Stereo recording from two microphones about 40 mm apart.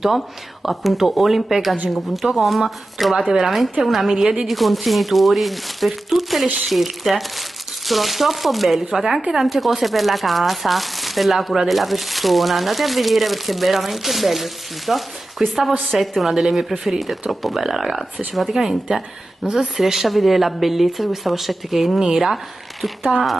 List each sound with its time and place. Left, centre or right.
0.7 s speech: centre
15.7 s a woman's voice: right
16.0 s speech: centre